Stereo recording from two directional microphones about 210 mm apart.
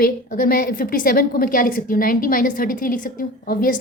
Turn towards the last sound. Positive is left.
turn(degrees=45)  # may be behind; listen again after turning